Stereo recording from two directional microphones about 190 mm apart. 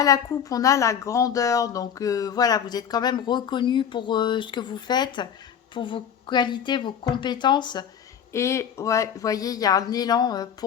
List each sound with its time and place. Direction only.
0.0 s speech: 20° left (ahead or behind)